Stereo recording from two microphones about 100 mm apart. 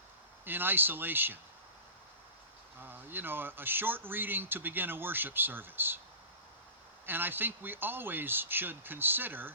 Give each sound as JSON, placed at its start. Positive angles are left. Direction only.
{"t": 0.4, "sound": "speech", "side_deg": -20}
{"t": 2.8, "sound": "speech", "side_deg": -20}
{"t": 7.0, "sound": "speech", "side_deg": -20}